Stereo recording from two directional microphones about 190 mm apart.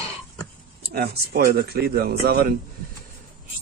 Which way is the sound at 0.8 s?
55° right (ahead or behind).